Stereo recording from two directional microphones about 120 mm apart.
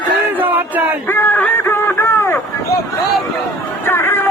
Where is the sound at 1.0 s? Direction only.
15° left (ahead or behind).